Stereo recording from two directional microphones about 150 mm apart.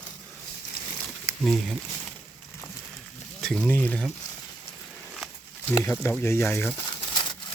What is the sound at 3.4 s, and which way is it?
Speech, 5° left (ahead or behind).